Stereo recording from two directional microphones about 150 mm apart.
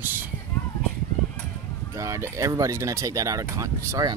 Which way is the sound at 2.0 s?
20° right (ahead or behind).